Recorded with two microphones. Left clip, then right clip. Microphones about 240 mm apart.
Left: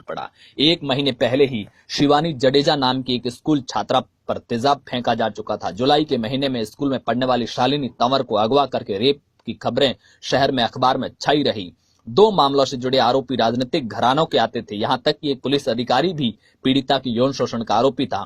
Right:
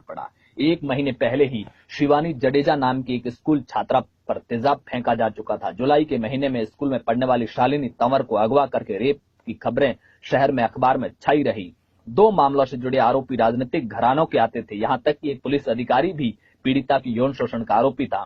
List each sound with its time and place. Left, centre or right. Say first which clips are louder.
0.6 s speech: left 4 dB; left
6.1 s speech: left 2 dB; left
17.2 s speech: left 3 dB; left
17.4 s speech: right 1 dB; left